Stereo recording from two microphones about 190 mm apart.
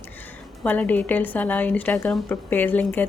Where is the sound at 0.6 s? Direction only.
10° left (ahead or behind).